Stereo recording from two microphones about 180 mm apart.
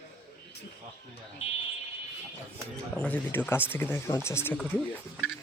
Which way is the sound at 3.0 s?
10° left (ahead or behind).